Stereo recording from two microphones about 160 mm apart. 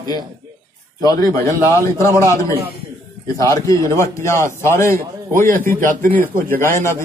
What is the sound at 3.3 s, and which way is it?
A man's voice, 20° left (ahead or behind).